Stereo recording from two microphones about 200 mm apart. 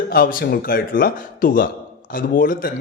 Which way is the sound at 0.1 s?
45° left (ahead or behind).